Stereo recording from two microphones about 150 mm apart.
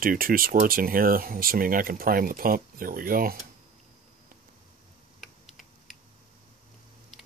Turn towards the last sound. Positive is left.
turn(degrees=0)  # may be behind; listen again after turning